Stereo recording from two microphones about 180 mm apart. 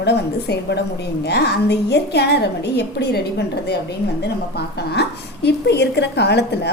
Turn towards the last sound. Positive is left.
turn(degrees=70)  # may be behind; listen again after turning